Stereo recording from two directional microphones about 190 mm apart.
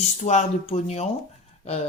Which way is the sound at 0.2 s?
40° left (ahead or behind).